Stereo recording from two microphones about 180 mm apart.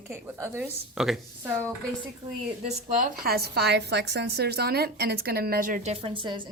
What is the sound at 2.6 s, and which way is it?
A woman's voice, 50° right (ahead or behind).